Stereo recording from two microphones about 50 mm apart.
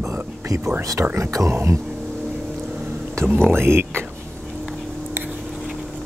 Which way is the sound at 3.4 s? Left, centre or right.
Right.